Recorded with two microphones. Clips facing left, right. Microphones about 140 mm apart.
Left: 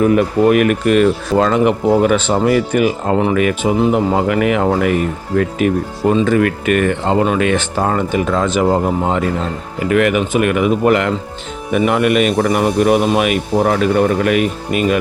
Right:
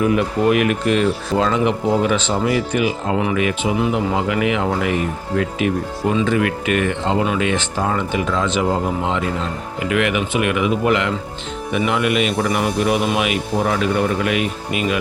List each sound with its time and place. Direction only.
0.0 s speech: 45° left (ahead or behind)
9.8 s speech: 45° left (ahead or behind)